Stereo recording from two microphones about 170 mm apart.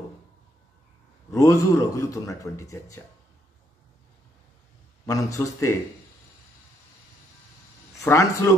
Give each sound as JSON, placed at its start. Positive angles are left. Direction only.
{"t": 1.3, "sound": "a man's voice", "side_deg": 20}
{"t": 5.0, "sound": "a man's voice", "side_deg": 20}
{"t": 8.0, "sound": "speech", "side_deg": 15}